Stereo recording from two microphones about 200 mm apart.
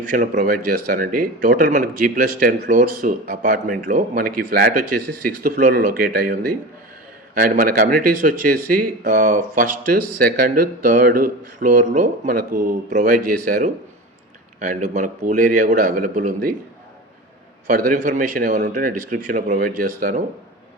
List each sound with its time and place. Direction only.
0.1 s a man's voice: 40° right (ahead or behind)
17.7 s a man's voice: 45° right (ahead or behind)